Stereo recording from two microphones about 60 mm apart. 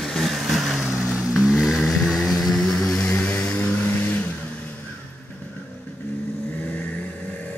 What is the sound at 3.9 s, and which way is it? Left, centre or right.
Vehicle, left.